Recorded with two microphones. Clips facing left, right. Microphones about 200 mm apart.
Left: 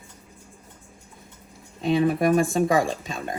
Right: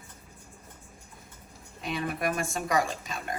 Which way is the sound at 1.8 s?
25° left (ahead or behind).